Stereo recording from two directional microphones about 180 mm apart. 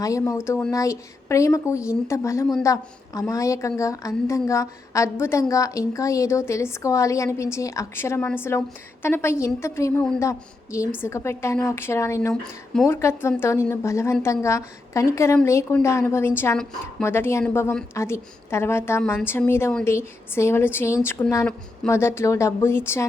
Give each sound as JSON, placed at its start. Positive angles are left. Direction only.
{"t": 0.0, "sound": "a woman's voice", "side_deg": 20}
{"t": 12.3, "sound": "speech", "side_deg": 5}
{"t": 13.0, "sound": "a woman's voice", "side_deg": 15}